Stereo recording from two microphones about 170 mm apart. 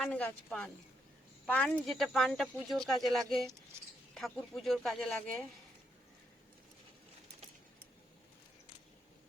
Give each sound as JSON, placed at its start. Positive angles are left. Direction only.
{"t": 0.0, "sound": "speech", "side_deg": 5}